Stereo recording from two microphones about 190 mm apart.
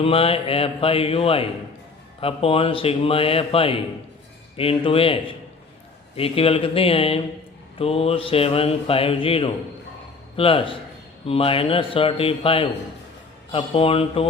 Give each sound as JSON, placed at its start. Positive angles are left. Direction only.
{"t": 0.0, "sound": "mantra", "side_deg": 30}
{"t": 6.1, "sound": "speech", "side_deg": 30}
{"t": 7.8, "sound": "mantra", "side_deg": 30}